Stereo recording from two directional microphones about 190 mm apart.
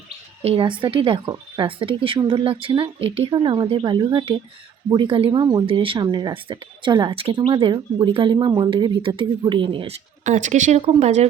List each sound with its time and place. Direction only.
0.4 s speech: 30° right (ahead or behind)